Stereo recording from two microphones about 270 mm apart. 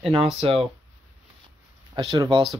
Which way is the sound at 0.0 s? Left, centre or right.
Right.